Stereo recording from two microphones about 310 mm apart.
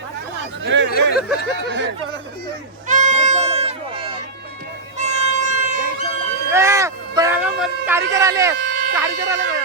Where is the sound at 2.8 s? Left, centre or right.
Right.